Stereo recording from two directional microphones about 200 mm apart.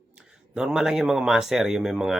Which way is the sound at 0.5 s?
5° right (ahead or behind).